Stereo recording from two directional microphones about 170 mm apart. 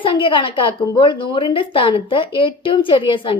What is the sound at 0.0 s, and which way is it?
A woman's voice, 30° left (ahead or behind).